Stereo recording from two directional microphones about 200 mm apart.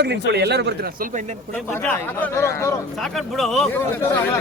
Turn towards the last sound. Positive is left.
turn(degrees=10)  # may be behind; listen again after turning